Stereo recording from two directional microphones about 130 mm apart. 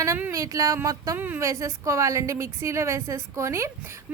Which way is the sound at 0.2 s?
25° right (ahead or behind).